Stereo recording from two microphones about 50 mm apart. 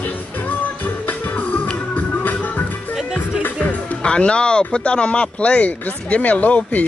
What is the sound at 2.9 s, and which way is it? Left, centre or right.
Music, centre.